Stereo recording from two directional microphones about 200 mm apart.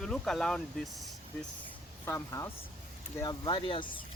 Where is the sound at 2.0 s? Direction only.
15° left (ahead or behind).